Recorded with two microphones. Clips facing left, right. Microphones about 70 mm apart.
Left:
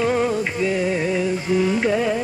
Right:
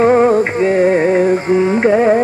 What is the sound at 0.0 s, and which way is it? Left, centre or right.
Carnatic music, right.